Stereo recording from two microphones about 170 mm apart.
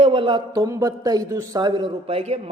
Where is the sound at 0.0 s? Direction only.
30° right (ahead or behind).